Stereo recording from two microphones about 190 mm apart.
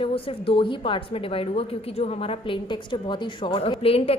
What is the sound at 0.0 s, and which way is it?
A woman's voice, 30° left (ahead or behind).